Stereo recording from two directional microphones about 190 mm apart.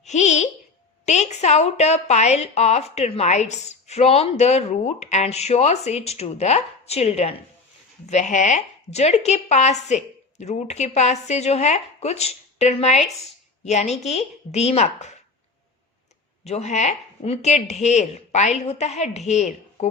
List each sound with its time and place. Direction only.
0.0 s a sound: 40° left (ahead or behind)
1.0 s a woman's voice: 35° left (ahead or behind)
16.4 s a woman's voice: 35° left (ahead or behind)